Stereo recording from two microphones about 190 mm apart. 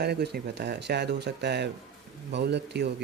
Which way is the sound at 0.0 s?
60° right (ahead or behind).